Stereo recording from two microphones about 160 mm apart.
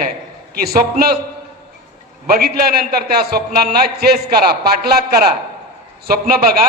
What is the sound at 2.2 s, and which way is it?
A man's voice, 75° right (ahead or behind).